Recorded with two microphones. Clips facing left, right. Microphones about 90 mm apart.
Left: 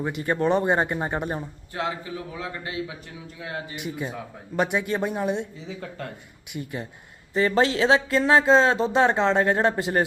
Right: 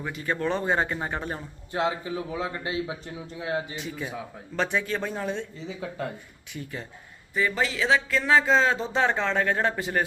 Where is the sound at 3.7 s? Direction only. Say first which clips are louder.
Left 2 dB; 15° left (ahead or behind).